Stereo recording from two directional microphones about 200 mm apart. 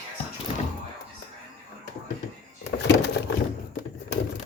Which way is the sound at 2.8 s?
60° left (ahead or behind).